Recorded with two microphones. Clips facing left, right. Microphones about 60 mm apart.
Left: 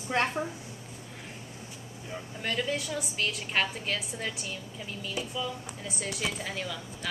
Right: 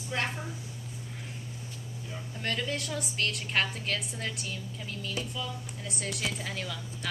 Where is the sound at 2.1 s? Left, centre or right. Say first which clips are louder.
Left 2 dB; centre.